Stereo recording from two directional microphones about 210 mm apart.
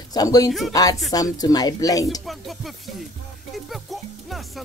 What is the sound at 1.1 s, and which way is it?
Speech, 20° left (ahead or behind).